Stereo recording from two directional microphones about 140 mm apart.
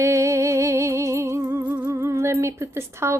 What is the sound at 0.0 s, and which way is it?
Music, 20° right (ahead or behind).